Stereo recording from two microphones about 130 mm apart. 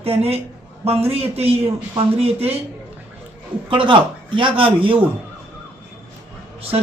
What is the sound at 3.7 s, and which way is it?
Speech, 40° right (ahead or behind).